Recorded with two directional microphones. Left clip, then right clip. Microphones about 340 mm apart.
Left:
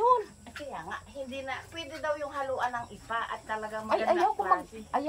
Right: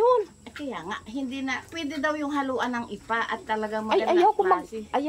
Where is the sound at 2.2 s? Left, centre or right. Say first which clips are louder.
Right 4 dB; right.